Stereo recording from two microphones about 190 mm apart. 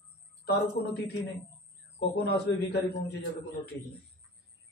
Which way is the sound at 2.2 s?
60° left (ahead or behind).